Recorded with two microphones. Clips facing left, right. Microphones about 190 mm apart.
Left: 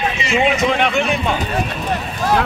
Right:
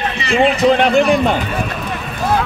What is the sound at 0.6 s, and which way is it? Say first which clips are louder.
Speech: right 6 dB; 35° right (ahead or behind).